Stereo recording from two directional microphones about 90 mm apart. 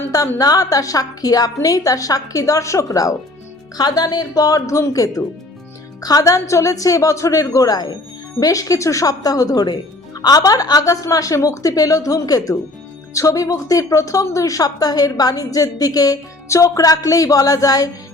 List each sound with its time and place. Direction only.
0.3 s a woman's voice: 40° left (ahead or behind)